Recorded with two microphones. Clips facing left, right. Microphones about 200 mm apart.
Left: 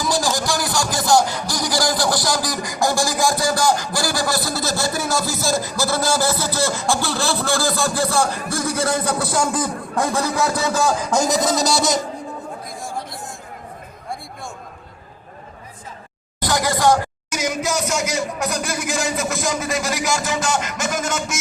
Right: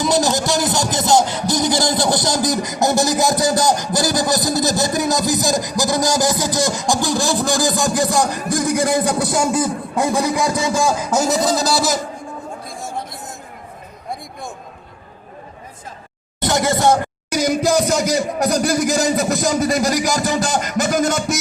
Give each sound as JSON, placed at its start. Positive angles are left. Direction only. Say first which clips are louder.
{"t": 0.0, "sound": "speech", "louder": "right 4 dB", "side_deg": -20}
{"t": 16.4, "sound": "speech", "louder": "right 2 dB", "side_deg": -25}
{"t": 17.3, "sound": "speech", "louder": "right 7 dB", "side_deg": -35}